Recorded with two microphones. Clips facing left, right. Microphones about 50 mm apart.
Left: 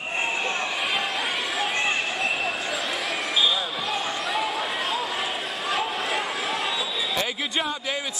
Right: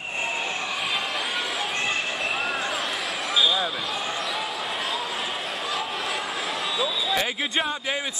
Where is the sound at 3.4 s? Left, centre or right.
Centre.